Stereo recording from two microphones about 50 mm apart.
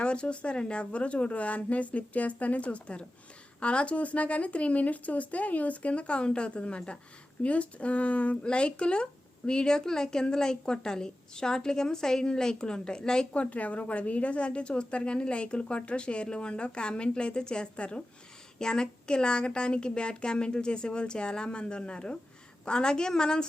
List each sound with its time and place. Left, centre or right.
0.0 s a woman's voice: left
13.3 s a woman's voice: left